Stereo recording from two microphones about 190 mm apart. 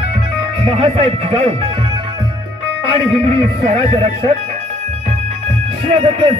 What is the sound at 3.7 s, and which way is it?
Music, 35° right (ahead or behind).